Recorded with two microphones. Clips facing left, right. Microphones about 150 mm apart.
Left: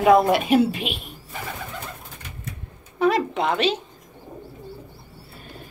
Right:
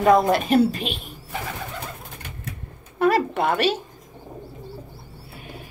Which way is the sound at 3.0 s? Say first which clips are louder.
Right 1 dB; 5° right (ahead or behind).